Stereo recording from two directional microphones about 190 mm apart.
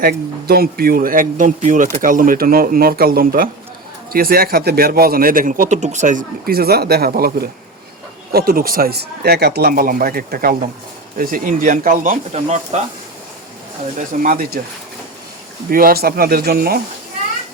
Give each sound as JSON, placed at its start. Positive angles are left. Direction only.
{"t": 0.0, "sound": "speech", "side_deg": -55}
{"t": 13.9, "sound": "speech", "side_deg": -45}
{"t": 15.7, "sound": "speech", "side_deg": -50}